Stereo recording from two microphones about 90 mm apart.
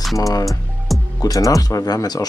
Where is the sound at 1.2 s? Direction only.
40° left (ahead or behind).